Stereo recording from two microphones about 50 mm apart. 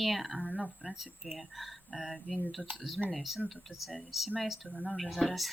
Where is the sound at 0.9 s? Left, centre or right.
Centre.